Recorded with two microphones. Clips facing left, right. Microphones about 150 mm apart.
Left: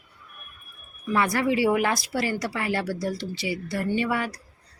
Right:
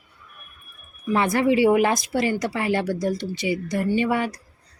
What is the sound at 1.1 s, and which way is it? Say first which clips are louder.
Speech: right 4 dB; 25° right (ahead or behind).